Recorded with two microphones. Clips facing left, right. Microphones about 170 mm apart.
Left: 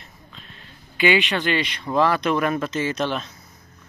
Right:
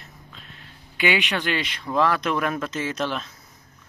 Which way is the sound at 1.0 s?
5° right (ahead or behind).